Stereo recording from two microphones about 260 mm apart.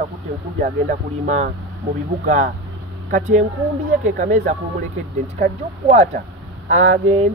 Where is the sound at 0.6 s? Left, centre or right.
Right.